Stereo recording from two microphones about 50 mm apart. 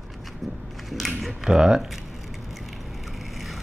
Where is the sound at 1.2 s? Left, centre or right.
Centre.